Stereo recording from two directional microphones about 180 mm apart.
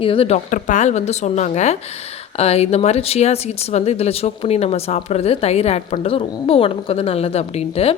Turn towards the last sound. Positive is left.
turn(degrees=35)  # may be behind; listen again after turning